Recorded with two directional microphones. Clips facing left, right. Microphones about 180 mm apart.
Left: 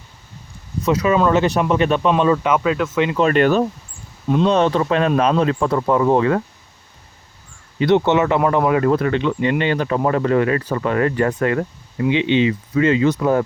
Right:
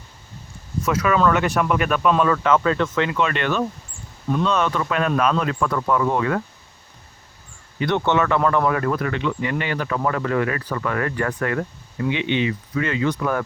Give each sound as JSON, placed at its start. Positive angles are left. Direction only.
{"t": 0.8, "sound": "speech", "side_deg": 20}
{"t": 3.2, "sound": "speech", "side_deg": 40}
{"t": 4.4, "sound": "speech", "side_deg": 30}
{"t": 7.8, "sound": "speech", "side_deg": 20}